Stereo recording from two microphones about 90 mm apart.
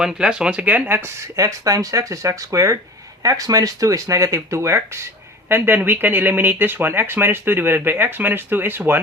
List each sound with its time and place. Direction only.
0.0 s speech: 10° right (ahead or behind)
0.9 s speech: 40° right (ahead or behind); by 9.0 s 20° right (ahead or behind)